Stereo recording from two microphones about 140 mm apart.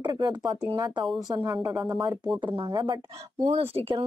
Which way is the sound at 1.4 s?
20° right (ahead or behind).